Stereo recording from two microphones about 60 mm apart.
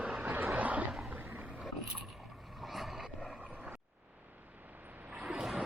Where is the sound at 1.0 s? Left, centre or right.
Right.